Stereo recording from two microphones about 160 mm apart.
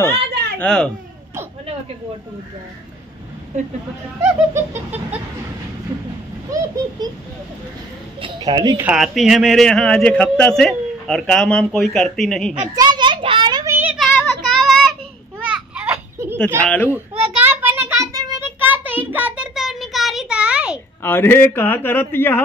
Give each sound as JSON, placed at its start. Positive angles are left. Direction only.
{"t": 0.3, "sound": "a sound", "side_deg": -90}
{"t": 0.6, "sound": "a man's voice", "side_deg": 5}
{"t": 4.2, "sound": "laughter", "side_deg": -15}
{"t": 7.0, "sound": "speech", "side_deg": -25}
{"t": 8.2, "sound": "a woman's voice", "side_deg": -25}
{"t": 8.7, "sound": "a man's voice", "side_deg": -5}
{"t": 12.7, "sound": "a child's voice", "side_deg": -25}
{"t": 13.9, "sound": "child singing", "side_deg": 0}
{"t": 15.4, "sound": "children playing", "side_deg": -10}
{"t": 16.6, "sound": "a man's voice", "side_deg": 10}
{"t": 17.4, "sound": "a sound", "side_deg": -10}
{"t": 18.0, "sound": "child singing", "side_deg": -20}
{"t": 21.0, "sound": "a man's voice", "side_deg": 15}